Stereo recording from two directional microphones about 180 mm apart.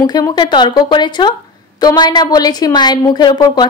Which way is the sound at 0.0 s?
20° left (ahead or behind).